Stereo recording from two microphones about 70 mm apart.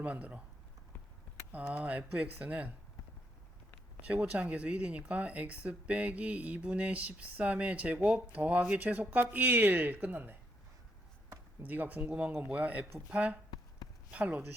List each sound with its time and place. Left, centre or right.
0.0 s speech: right
1.5 s speech: right
4.0 s speech: centre
11.6 s speech: right